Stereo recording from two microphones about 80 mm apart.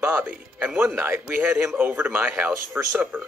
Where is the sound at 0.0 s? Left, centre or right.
Right.